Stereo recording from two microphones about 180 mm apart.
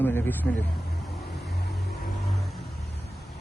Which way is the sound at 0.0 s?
10° left (ahead or behind).